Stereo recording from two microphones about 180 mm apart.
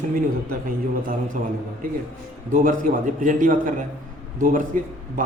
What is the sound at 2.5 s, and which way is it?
A man's voice, 50° right (ahead or behind).